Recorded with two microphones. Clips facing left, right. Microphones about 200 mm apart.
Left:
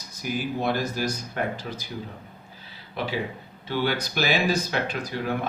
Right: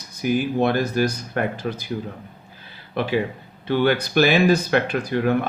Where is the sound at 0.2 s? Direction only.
60° right (ahead or behind).